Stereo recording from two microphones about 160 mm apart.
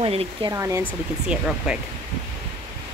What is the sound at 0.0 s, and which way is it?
Speech, 35° right (ahead or behind).